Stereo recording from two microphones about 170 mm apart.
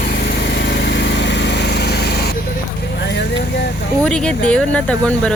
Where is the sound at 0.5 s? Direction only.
85° left.